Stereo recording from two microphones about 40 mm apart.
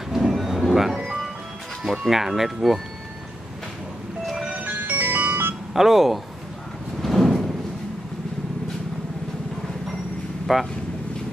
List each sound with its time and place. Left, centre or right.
0.3 s vehicle: centre
0.9 s music: centre
1.8 s speech: centre
4.6 s music: right
5.7 s speech: centre
7.0 s a sound: centre
10.4 s speech: centre